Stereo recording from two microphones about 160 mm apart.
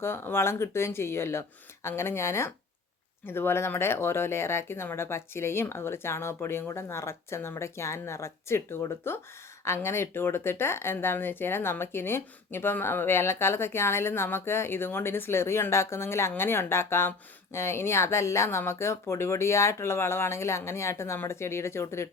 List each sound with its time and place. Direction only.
0.0 s speech: 15° left (ahead or behind)